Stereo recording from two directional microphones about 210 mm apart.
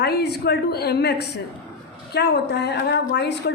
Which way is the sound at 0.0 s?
50° left (ahead or behind).